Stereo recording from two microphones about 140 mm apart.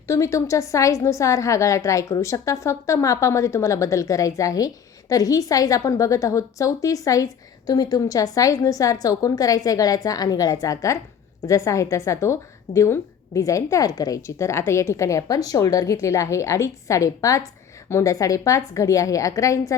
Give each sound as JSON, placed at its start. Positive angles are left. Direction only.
{"t": 0.1, "sound": "a woman's voice", "side_deg": 20}